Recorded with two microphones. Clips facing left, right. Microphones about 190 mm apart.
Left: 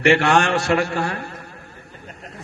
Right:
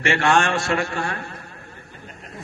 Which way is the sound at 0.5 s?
65° left (ahead or behind).